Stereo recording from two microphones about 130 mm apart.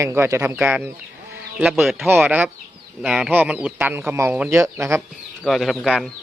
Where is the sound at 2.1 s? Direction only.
15° right (ahead or behind).